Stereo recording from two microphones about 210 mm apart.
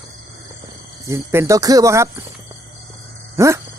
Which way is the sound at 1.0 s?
15° right (ahead or behind).